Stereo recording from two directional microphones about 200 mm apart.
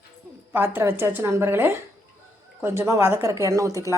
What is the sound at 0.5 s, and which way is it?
Speech, 10° right (ahead or behind).